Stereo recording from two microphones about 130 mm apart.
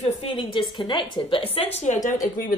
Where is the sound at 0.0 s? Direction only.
50° left (ahead or behind).